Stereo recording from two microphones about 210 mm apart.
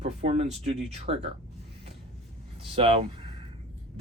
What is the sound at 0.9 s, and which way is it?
Speech, 30° right (ahead or behind).